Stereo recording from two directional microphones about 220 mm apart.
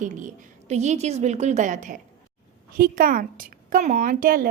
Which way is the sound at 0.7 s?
30° right (ahead or behind).